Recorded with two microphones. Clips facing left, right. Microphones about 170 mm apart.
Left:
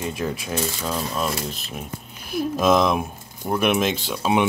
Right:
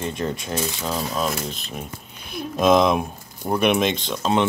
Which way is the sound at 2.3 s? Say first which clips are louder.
Right 1 dB; 5° left (ahead or behind).